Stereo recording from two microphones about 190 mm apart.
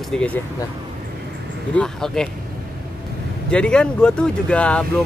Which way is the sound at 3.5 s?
5° left (ahead or behind).